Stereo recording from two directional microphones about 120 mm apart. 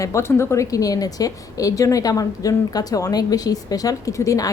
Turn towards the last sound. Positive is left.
turn(degrees=25)  # may be behind; listen again after turning